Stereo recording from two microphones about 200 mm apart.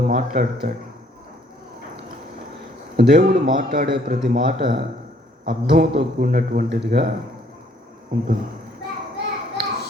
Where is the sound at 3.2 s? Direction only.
40° right (ahead or behind).